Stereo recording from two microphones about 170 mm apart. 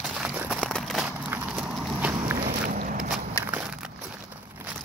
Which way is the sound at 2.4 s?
55° right (ahead or behind).